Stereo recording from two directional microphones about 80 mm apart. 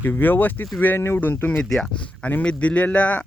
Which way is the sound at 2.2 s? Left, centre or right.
Centre.